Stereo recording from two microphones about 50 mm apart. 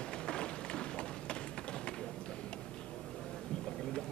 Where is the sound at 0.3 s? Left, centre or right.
Centre.